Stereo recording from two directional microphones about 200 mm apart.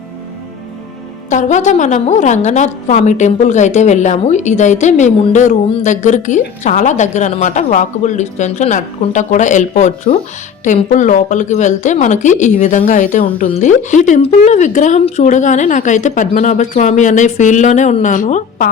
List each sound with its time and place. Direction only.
1.3 s a woman's voice: 35° left (ahead or behind)